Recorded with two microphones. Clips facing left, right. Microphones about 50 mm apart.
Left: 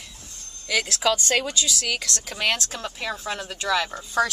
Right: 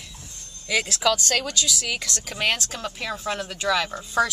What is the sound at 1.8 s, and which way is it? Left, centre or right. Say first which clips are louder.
Speech: left 1 dB; centre.